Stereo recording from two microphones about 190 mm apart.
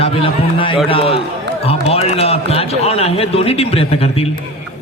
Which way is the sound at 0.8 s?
30° left (ahead or behind).